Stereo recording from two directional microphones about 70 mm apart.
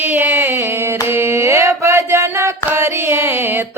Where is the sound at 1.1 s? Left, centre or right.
Right.